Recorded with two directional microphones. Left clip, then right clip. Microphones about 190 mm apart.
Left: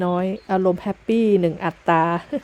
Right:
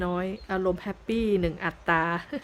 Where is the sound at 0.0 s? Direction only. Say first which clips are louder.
Left 7 dB; 25° left (ahead or behind).